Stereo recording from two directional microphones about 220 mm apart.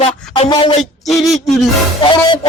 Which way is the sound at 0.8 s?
Centre (ahead or behind).